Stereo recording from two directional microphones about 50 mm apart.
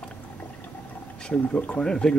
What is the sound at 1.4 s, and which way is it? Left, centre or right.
Speech, left.